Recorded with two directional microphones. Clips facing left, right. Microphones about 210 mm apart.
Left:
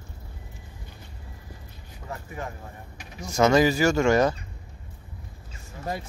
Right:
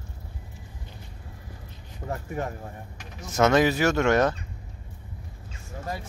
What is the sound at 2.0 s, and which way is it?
Vehicle, 40° right (ahead or behind).